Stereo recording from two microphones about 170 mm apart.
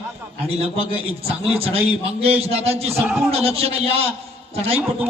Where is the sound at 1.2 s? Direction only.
35° right (ahead or behind).